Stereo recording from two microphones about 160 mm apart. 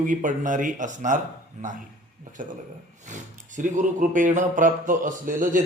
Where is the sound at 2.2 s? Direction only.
55° right (ahead or behind).